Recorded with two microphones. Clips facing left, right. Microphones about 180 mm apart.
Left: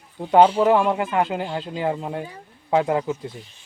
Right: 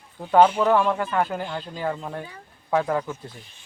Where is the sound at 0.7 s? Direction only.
15° left (ahead or behind).